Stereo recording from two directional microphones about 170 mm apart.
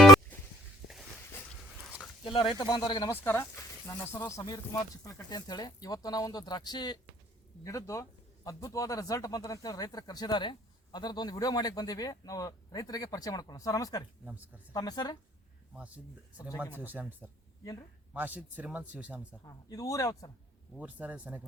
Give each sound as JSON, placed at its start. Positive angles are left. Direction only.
{"t": 2.2, "sound": "speech", "side_deg": 30}
{"t": 3.1, "sound": "speech", "side_deg": 15}
{"t": 14.3, "sound": "speech", "side_deg": -10}
{"t": 14.7, "sound": "speech", "side_deg": 20}
{"t": 15.7, "sound": "speech", "side_deg": -10}
{"t": 19.5, "sound": "speech", "side_deg": 20}
{"t": 20.7, "sound": "speech", "side_deg": -10}